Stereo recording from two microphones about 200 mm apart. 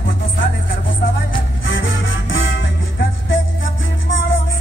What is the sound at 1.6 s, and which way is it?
Music, 70° left (ahead or behind).